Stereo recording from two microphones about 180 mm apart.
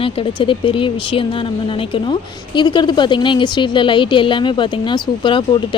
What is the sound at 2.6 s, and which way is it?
A woman's voice, 25° left (ahead or behind).